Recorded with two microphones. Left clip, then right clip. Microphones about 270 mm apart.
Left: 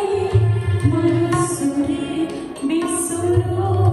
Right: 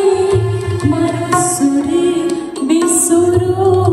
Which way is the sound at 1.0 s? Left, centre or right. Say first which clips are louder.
Right 2 dB; centre.